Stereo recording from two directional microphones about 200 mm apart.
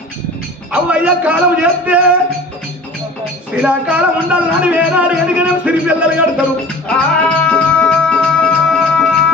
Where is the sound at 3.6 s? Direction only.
5° right (ahead or behind).